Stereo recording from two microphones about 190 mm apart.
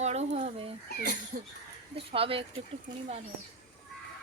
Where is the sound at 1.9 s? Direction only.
30° right (ahead or behind).